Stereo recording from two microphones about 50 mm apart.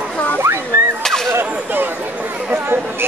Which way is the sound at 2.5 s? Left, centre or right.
Right.